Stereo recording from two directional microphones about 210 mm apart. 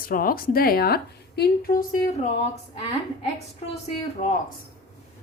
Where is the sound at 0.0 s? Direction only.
40° left (ahead or behind).